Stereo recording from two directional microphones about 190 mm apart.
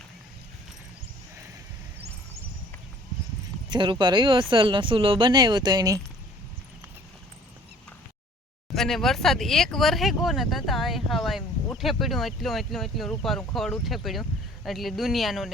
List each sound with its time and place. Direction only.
3.7 s speech: 25° right (ahead or behind)
8.7 s speech: centre (ahead or behind)